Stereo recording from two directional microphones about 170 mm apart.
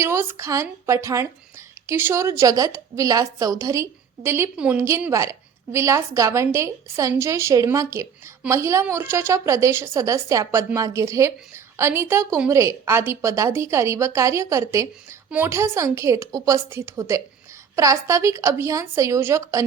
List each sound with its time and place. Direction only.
0.0 s a woman's voice: 15° right (ahead or behind)